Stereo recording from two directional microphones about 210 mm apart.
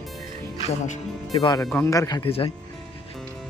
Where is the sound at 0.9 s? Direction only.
25° left (ahead or behind).